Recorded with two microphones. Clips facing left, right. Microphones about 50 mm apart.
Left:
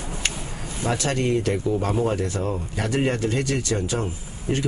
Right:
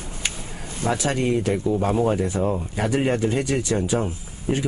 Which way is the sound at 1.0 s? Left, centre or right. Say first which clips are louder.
Even; centre.